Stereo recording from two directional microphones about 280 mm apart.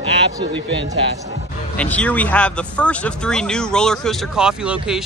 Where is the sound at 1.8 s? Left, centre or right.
Centre.